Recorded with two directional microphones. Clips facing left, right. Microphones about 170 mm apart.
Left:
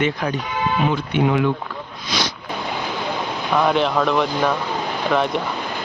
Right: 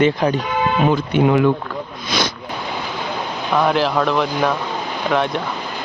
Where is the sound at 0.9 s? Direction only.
45° right (ahead or behind).